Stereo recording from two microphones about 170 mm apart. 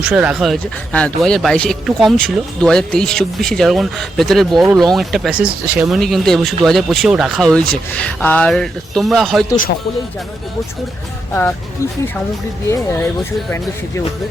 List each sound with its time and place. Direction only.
0.0 s speech: 10° right (ahead or behind)
12.6 s speech: 15° left (ahead or behind)